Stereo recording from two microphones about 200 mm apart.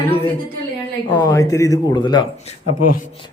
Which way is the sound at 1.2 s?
15° left (ahead or behind).